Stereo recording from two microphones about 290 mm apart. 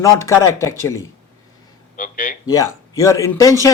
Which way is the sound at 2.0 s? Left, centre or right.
Left.